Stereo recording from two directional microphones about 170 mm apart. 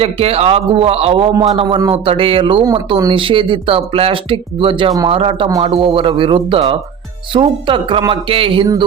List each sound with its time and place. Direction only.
0.0 s speech: 35° right (ahead or behind)